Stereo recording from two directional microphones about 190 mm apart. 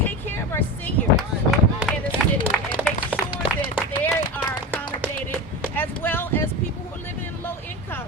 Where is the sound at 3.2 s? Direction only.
25° left (ahead or behind).